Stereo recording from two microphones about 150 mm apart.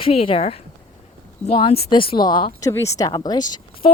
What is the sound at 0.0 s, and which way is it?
A woman's voice, 40° left (ahead or behind).